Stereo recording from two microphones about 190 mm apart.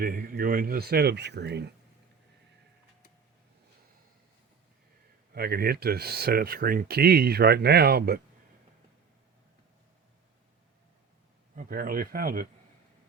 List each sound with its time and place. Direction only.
0.0 s speech: 50° right (ahead or behind)
5.3 s speech: 55° right (ahead or behind)
11.5 s speech: 50° right (ahead or behind)